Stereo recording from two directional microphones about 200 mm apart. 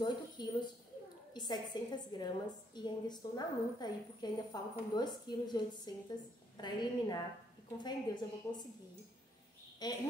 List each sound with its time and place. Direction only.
0.0 s a sound: 20° left (ahead or behind)
2.1 s a woman's voice: 20° left (ahead or behind)
9.8 s a woman's voice: 20° left (ahead or behind)